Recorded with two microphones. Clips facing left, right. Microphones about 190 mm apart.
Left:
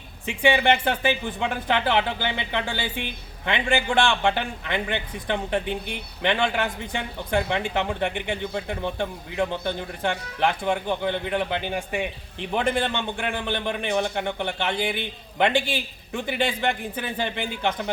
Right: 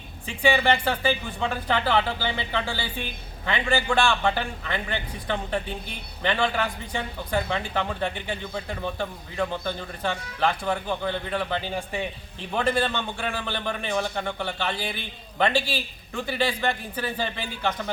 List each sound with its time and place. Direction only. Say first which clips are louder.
0.4 s a man's voice: left 1 dB; 20° left (ahead or behind)